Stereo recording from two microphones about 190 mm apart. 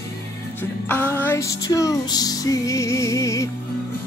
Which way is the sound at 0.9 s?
10° left (ahead or behind).